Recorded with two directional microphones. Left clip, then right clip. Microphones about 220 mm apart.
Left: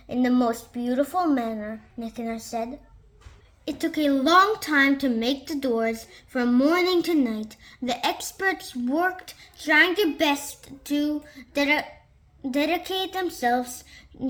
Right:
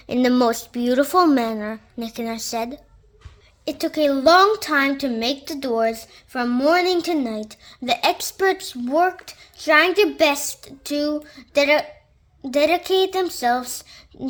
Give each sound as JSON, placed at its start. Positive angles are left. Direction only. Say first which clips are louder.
{"t": 0.1, "sound": "speech", "louder": "right 5 dB", "side_deg": -50}
{"t": 3.8, "sound": "a woman's voice", "louder": "right 4 dB", "side_deg": -35}